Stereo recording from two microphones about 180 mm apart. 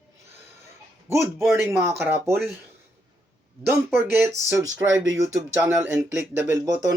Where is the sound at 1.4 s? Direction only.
Centre (ahead or behind).